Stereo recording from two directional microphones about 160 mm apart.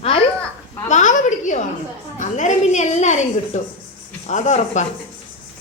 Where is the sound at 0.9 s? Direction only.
50° left (ahead or behind).